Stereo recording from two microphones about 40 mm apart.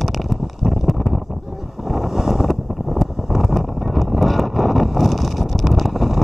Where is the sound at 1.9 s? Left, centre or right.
Centre.